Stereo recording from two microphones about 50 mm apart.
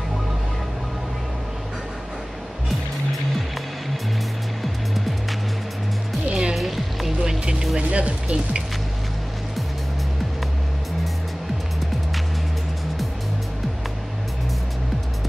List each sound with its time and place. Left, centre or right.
6.2 s music: centre
6.5 s music: centre
7.2 s music: centre